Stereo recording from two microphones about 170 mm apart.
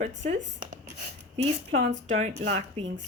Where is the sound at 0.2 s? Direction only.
45° right (ahead or behind).